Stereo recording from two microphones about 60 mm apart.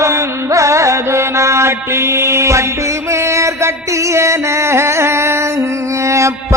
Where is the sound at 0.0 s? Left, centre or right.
Right.